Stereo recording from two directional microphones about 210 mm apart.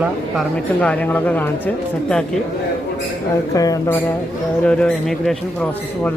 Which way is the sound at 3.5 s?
15° left (ahead or behind).